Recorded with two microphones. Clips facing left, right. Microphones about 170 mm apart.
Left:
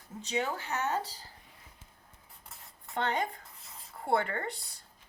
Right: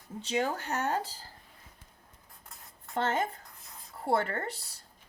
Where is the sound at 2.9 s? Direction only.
40° right (ahead or behind).